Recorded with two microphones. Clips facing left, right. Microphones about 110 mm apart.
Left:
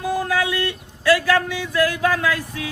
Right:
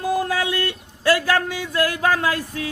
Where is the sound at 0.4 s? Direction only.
45° right (ahead or behind).